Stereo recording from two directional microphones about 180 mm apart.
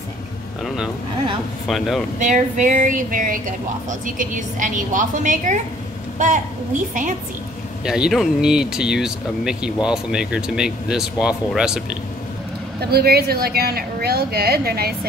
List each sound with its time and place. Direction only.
1.7 s speech: centre (ahead or behind)
2.1 s a woman's voice: 45° right (ahead or behind)
7.8 s speech: 5° right (ahead or behind)
12.9 s a woman's voice: 60° right (ahead or behind)